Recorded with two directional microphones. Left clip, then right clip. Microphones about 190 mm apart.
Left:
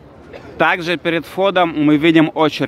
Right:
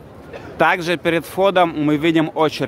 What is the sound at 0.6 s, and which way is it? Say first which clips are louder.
Speech: left 1 dB; centre (ahead or behind).